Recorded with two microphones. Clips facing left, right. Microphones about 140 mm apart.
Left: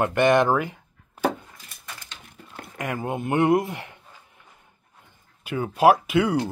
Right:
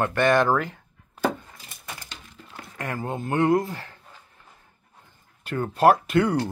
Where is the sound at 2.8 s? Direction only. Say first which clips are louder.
Left 2 dB; 15° left (ahead or behind).